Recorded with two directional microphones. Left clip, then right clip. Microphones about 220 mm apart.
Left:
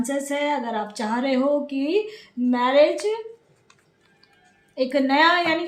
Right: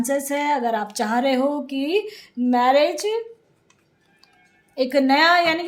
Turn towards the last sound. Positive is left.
turn(degrees=-40)  # may be behind; listen again after turning